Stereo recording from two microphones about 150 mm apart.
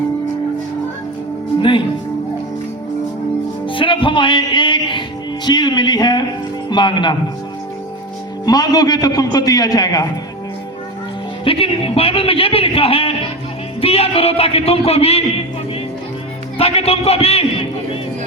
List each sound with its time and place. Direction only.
3.7 s music: 35° left (ahead or behind)
5.5 s a sound: 30° left (ahead or behind)
6.7 s a man's voice: 30° left (ahead or behind)
8.4 s a man's voice: 25° left (ahead or behind)
11.4 s a man's voice: 40° left (ahead or behind)
16.6 s a man's voice: 45° left (ahead or behind)